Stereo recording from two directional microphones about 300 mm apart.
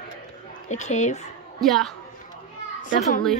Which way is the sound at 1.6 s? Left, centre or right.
Centre.